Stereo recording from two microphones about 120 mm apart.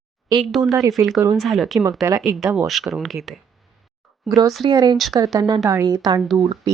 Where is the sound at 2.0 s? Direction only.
25° right (ahead or behind).